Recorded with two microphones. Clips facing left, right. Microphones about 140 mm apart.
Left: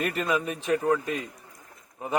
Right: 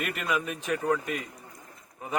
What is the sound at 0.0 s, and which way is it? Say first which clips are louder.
Speech: left 3 dB; 30° left (ahead or behind).